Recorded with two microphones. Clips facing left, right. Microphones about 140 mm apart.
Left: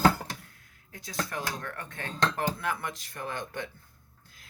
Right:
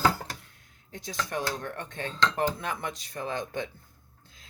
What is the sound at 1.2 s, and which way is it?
Speech, 20° right (ahead or behind).